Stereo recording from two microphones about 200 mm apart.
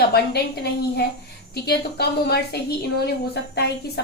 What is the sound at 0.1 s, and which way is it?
A woman's voice, 55° left (ahead or behind).